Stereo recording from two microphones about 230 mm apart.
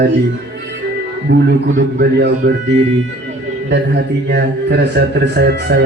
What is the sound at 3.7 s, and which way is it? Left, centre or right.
Speech, right.